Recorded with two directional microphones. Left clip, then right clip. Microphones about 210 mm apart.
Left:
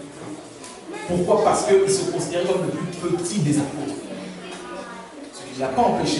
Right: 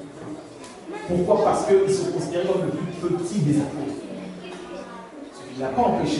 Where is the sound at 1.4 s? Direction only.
15° right (ahead or behind).